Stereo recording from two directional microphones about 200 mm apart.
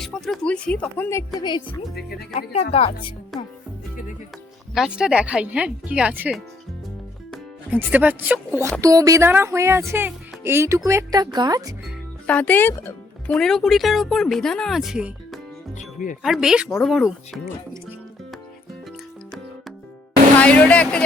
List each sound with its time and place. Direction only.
0.0 s speech: centre (ahead or behind)
1.4 s a woman's voice: 25° left (ahead or behind)
2.0 s music: 55° left (ahead or behind)
2.3 s a woman's voice: 30° left (ahead or behind)
3.3 s music: centre (ahead or behind)
4.7 s speech: 5° right (ahead or behind); by 11.7 s 20° right (ahead or behind)
12.2 s speech: 10° left (ahead or behind)
15.8 s music: 40° left (ahead or behind)
16.2 s speech: 5° right (ahead or behind)
20.4 s speech: 5° left (ahead or behind)